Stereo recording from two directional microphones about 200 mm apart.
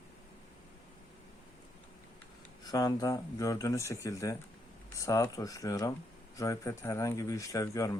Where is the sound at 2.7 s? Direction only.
20° left (ahead or behind).